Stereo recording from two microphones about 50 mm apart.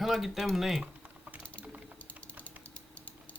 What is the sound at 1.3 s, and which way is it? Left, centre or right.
Typing, right.